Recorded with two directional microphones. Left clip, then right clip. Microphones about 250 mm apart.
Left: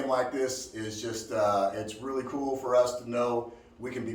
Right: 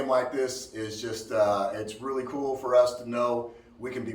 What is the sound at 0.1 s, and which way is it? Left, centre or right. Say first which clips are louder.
Speech: right 3 dB; centre.